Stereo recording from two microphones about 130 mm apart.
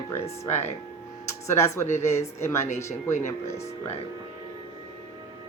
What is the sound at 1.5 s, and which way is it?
Speech, 20° left (ahead or behind).